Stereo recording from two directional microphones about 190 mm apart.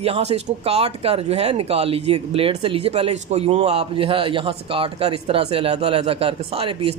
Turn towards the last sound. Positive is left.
turn(degrees=-30)  # may be behind; listen again after turning